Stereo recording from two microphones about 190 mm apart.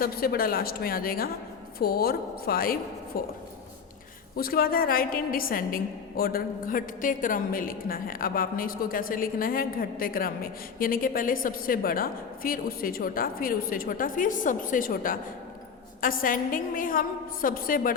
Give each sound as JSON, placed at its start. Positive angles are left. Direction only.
{"t": 0.0, "sound": "a woman's voice", "side_deg": 50}
{"t": 4.4, "sound": "a woman's voice", "side_deg": 50}